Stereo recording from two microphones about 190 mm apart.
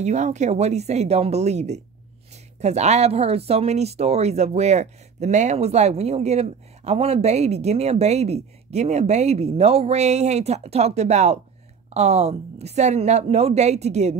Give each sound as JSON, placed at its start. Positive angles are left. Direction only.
{"t": 0.0, "sound": "speech", "side_deg": -35}